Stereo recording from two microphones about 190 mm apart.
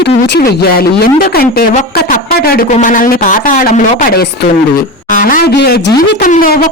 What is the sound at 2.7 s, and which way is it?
A man's voice, 45° left (ahead or behind).